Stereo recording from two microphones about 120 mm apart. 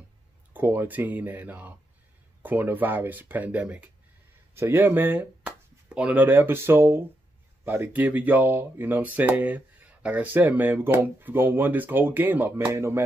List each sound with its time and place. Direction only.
0.5 s speech: 15° right (ahead or behind)